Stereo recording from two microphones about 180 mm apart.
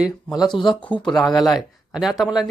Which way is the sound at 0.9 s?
25° left (ahead or behind).